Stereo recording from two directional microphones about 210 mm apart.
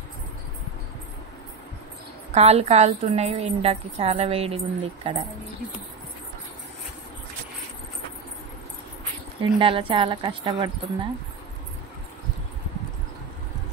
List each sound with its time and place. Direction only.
2.3 s a woman's voice: 30° right (ahead or behind)
9.4 s a woman's voice: 25° right (ahead or behind)